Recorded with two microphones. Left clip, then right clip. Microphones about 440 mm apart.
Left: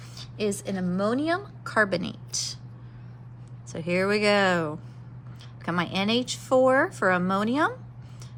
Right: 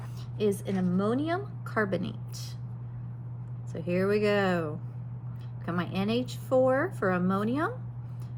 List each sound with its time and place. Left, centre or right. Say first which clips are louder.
0.2 s speech: even; left
3.7 s speech: left 3 dB; left